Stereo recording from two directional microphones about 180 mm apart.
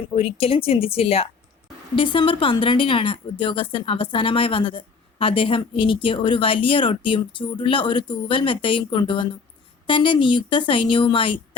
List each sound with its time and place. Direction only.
0.1 s speech: 30° left (ahead or behind)